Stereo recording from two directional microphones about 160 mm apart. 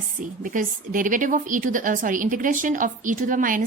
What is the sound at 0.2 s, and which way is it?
A woman's voice, 55° right (ahead or behind).